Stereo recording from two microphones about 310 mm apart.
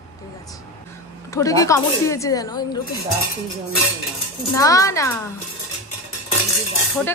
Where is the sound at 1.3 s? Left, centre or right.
Centre.